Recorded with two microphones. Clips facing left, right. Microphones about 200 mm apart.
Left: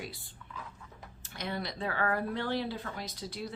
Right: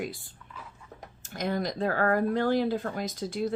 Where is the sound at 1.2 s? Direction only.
45° right (ahead or behind).